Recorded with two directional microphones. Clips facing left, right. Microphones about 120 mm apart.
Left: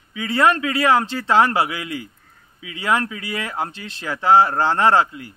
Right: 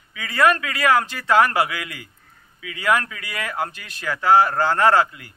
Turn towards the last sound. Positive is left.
turn(degrees=25)  # may be behind; listen again after turning